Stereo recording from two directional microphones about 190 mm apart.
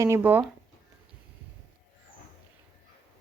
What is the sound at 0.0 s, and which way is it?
Speech, 10° right (ahead or behind).